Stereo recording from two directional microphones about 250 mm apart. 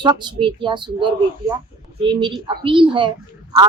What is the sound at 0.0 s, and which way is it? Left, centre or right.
Speech, centre.